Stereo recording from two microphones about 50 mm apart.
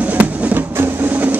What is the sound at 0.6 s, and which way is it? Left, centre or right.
Music, right.